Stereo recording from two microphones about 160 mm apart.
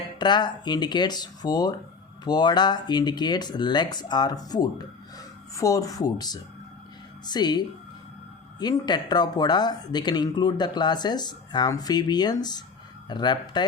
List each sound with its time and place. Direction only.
0.2 s speech: 25° left (ahead or behind)